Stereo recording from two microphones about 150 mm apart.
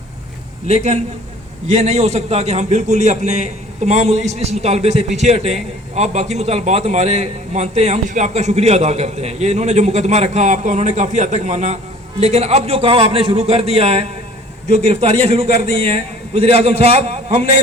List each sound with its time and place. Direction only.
0.7 s a man's voice: 45° right (ahead or behind)